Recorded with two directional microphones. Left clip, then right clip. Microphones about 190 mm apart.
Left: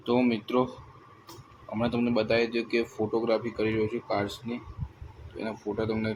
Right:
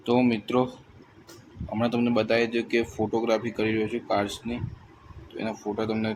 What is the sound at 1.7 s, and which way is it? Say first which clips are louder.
Speech: right 3 dB; 10° right (ahead or behind).